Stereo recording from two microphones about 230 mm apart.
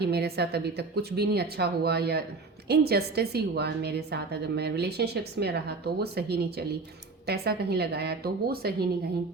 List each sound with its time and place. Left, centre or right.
0.0 s a woman's voice: right